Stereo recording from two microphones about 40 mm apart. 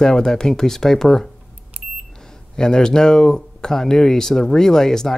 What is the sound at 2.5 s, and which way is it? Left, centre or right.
Speech, centre.